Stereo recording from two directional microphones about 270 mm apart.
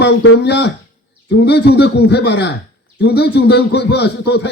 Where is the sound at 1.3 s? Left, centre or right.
Left.